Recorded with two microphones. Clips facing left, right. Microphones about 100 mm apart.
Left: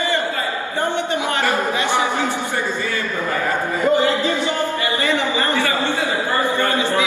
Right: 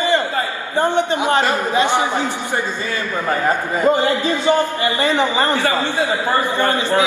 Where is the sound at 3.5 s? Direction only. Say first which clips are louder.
Right 1 dB; 20° right (ahead or behind).